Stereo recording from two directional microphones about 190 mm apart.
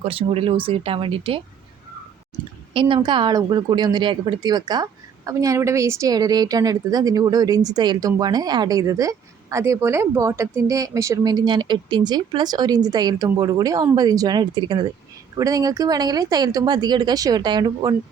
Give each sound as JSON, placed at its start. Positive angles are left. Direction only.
{"t": 0.0, "sound": "speech", "side_deg": -30}
{"t": 2.7, "sound": "speech", "side_deg": -25}